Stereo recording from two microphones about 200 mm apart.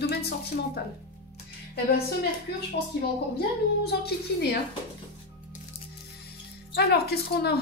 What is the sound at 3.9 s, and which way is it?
Speech, 55° left (ahead or behind).